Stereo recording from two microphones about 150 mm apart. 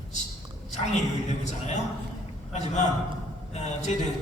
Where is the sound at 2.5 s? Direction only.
50° left (ahead or behind).